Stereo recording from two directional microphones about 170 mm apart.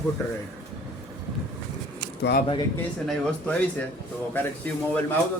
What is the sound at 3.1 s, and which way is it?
A man's voice, 10° left (ahead or behind).